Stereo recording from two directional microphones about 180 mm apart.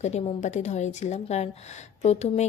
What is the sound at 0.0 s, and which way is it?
Speech, 35° left (ahead or behind).